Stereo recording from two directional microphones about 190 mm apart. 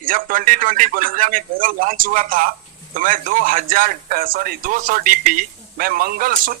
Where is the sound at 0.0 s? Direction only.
45° right (ahead or behind).